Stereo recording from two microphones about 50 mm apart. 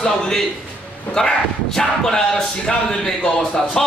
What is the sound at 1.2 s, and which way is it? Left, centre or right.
A man's voice, centre.